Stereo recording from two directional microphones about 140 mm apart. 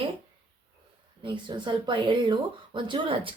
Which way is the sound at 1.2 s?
35° right (ahead or behind).